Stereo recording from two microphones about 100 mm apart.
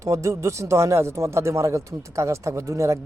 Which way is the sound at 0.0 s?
30° right (ahead or behind).